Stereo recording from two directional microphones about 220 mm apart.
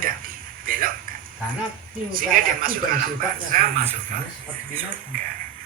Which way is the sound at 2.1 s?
40° right (ahead or behind).